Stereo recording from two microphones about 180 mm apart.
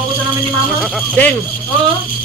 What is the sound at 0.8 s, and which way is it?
Speech, 10° left (ahead or behind).